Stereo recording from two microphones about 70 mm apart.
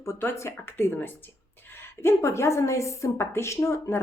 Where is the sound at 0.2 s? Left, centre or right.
Left.